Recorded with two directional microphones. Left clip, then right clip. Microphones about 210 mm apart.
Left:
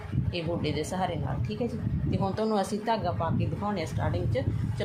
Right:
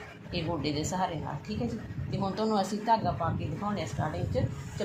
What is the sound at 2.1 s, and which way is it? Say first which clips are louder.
Speech: left 1 dB; 20° left (ahead or behind).